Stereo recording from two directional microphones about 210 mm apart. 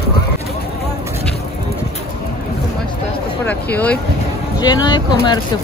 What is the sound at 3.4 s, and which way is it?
Speech, 5° left (ahead or behind).